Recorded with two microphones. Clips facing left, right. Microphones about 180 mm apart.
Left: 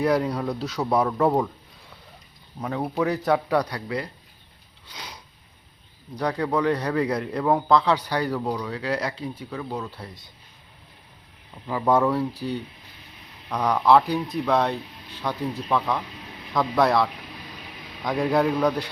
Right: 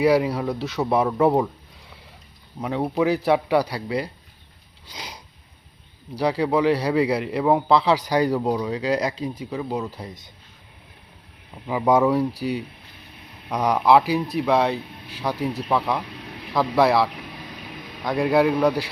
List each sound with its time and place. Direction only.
0.0 s speech: 5° right (ahead or behind)
2.6 s a man's voice: 10° right (ahead or behind)
6.1 s a man's voice: 10° right (ahead or behind)
11.6 s a man's voice: 15° right (ahead or behind)